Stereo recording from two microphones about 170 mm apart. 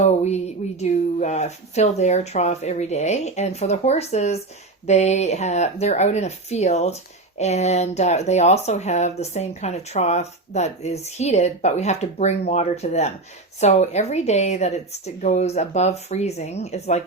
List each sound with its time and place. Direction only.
0.1 s speech: 40° left (ahead or behind)